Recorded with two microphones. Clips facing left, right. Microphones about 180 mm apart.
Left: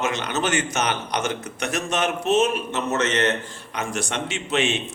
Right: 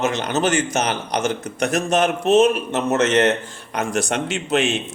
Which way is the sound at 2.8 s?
50° right (ahead or behind).